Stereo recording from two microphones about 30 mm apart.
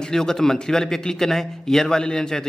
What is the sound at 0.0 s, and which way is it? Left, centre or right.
A man's voice, centre.